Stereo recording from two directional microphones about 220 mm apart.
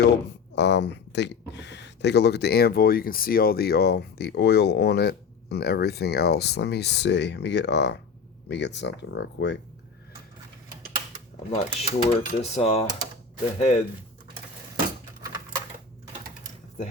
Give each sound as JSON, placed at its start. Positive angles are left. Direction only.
{"t": 0.5, "sound": "speech", "side_deg": 50}
{"t": 11.5, "sound": "speech", "side_deg": 30}